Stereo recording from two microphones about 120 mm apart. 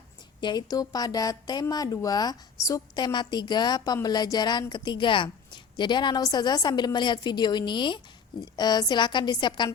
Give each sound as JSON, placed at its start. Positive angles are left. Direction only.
{"t": 0.3, "sound": "a woman's voice", "side_deg": 40}